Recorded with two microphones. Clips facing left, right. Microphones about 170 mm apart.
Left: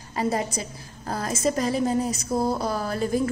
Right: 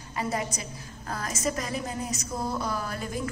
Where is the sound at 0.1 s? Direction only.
35° left (ahead or behind).